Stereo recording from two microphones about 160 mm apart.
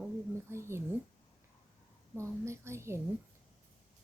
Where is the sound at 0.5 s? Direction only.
15° right (ahead or behind).